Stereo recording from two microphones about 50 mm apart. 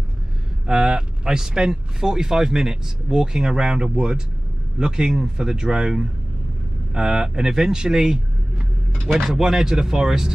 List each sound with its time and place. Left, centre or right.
0.7 s speech: centre